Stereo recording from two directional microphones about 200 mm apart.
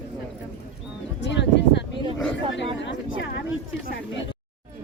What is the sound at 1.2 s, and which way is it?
Speech, 60° left (ahead or behind).